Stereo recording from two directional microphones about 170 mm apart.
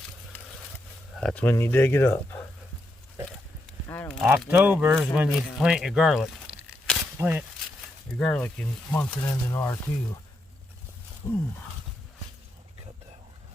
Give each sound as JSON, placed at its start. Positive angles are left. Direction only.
{"t": 1.1, "sound": "speech", "side_deg": 5}
{"t": 3.8, "sound": "a sound", "side_deg": 15}
{"t": 4.2, "sound": "speech", "side_deg": -5}
{"t": 7.2, "sound": "speech", "side_deg": -10}
{"t": 8.2, "sound": "speech", "side_deg": 5}
{"t": 11.2, "sound": "roaring cats", "side_deg": 20}